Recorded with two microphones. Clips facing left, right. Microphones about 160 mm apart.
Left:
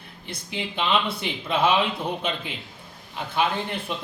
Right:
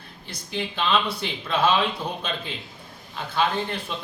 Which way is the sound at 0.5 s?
15° left (ahead or behind).